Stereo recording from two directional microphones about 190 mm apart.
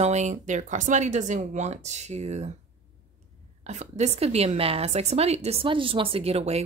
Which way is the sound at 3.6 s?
35° right (ahead or behind).